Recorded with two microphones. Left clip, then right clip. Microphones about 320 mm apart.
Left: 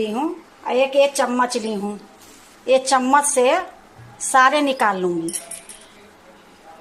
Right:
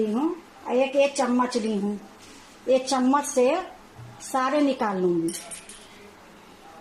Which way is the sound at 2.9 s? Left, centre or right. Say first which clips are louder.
Left 7 dB; left.